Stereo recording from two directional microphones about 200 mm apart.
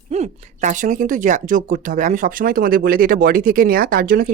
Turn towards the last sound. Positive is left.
turn(degrees=-45)  # may be behind; listen again after turning